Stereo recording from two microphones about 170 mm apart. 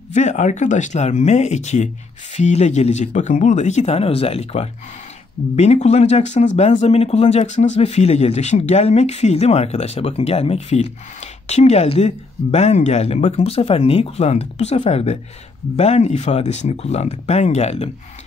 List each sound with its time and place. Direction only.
0.1 s speech: 45° left (ahead or behind)